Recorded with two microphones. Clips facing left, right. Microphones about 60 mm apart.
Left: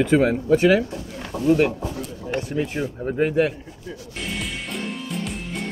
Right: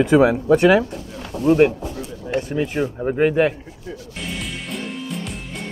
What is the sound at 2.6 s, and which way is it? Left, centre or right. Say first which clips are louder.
Speech: right 3 dB; right.